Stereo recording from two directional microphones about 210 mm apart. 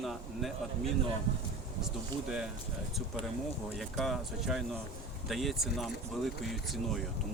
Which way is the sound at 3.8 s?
Centre (ahead or behind).